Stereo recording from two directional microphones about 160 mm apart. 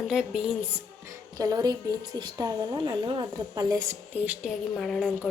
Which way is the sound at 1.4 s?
25° right (ahead or behind).